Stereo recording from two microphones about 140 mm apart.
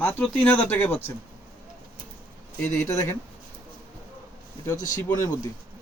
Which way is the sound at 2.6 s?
20° left (ahead or behind).